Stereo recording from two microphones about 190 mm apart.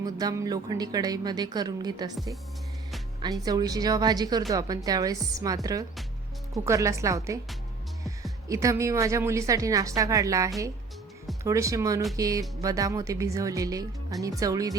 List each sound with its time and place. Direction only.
0.0 s a woman's voice: 20° right (ahead or behind)
3.2 s a woman's voice: 20° right (ahead or behind)
6.7 s speech: 15° right (ahead or behind)